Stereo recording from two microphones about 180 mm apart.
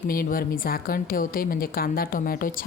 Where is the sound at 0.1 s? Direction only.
50° left (ahead or behind).